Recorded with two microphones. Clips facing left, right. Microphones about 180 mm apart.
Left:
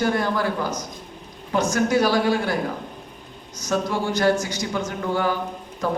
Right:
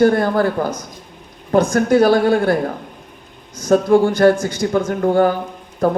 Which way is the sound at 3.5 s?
55° right (ahead or behind).